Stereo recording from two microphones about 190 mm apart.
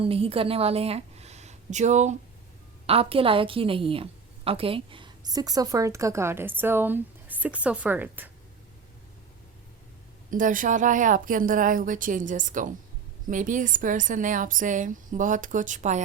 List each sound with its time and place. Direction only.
0.0 s a woman's voice: 30° right (ahead or behind); by 8.3 s 10° right (ahead or behind)
10.2 s speech: 45° right (ahead or behind)